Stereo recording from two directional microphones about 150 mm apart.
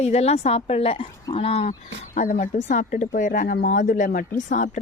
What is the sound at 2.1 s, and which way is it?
Speech, 55° left (ahead or behind).